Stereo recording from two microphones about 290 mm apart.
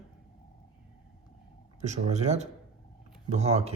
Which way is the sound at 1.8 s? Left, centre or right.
Right.